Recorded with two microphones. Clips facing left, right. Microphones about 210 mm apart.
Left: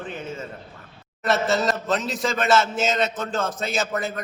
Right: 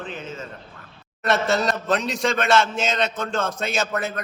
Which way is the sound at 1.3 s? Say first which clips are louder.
Even; centre (ahead or behind).